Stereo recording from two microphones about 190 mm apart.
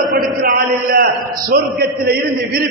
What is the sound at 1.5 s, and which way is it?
Speech, 55° right (ahead or behind).